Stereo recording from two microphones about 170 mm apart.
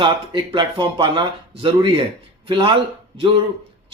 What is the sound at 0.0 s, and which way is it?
A man's voice, 30° right (ahead or behind).